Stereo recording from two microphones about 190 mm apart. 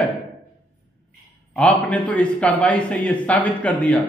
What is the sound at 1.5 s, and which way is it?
A man's voice, 5° left (ahead or behind).